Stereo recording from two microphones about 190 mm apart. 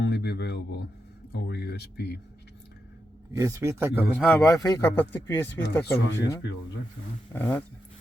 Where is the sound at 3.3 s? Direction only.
15° right (ahead or behind).